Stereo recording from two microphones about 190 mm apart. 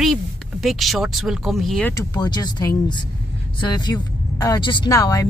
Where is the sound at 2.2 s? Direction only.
20° left (ahead or behind).